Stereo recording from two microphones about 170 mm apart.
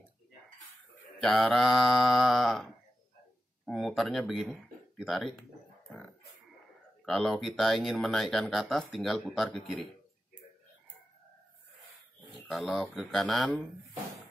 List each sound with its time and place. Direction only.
1.1 s speech: centre (ahead or behind)
5.9 s a sound: centre (ahead or behind)
7.1 s speech: centre (ahead or behind)
12.4 s speech: centre (ahead or behind)